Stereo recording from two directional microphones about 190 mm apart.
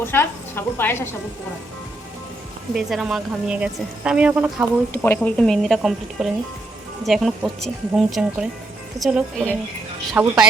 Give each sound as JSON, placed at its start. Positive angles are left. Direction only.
{"t": 0.0, "sound": "a woman's voice", "side_deg": 10}
{"t": 2.7, "sound": "a woman's voice", "side_deg": 0}
{"t": 5.0, "sound": "a woman's voice", "side_deg": 10}